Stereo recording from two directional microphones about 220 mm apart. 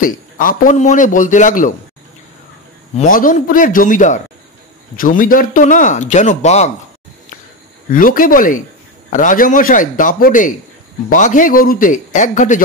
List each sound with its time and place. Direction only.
0.0 s a man's voice: 40° left (ahead or behind)
3.0 s a man's voice: 40° left (ahead or behind)
7.9 s a man's voice: 40° left (ahead or behind)